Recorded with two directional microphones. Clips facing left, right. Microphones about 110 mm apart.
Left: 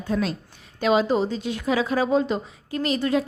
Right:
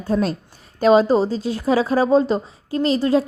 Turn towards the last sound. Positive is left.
turn(degrees=-30)  # may be behind; listen again after turning